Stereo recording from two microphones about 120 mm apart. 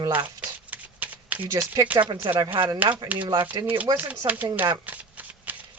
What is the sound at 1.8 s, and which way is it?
Speech, 15° right (ahead or behind).